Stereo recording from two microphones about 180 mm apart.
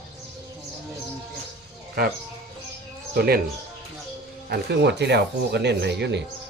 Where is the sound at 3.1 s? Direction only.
60° right (ahead or behind).